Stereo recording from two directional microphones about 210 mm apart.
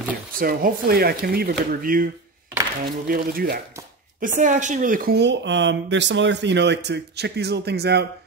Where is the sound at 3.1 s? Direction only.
45° right (ahead or behind).